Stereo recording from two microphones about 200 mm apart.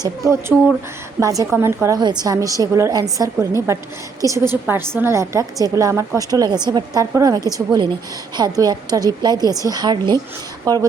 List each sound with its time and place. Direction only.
0.0 s a woman's voice: 15° right (ahead or behind)